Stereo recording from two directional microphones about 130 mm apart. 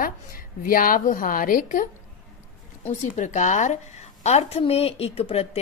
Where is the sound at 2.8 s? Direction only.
65° left (ahead or behind).